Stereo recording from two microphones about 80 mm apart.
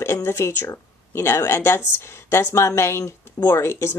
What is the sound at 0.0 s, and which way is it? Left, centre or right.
A woman's voice, left.